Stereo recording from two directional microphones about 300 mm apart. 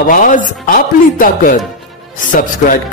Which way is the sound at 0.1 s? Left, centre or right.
Left.